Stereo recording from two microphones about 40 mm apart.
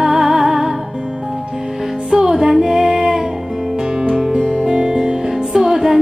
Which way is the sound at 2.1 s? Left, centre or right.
Centre.